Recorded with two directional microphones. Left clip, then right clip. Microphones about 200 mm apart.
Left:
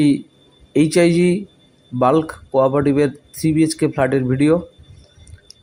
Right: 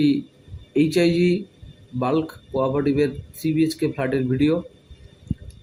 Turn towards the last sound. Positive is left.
turn(degrees=35)  # may be behind; listen again after turning